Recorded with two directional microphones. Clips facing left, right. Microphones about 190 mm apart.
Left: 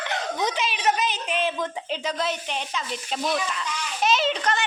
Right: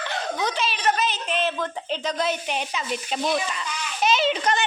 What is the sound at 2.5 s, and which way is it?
A child's voice, 10° right (ahead or behind).